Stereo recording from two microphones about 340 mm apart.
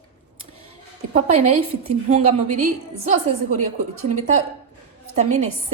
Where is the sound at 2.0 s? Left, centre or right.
Centre.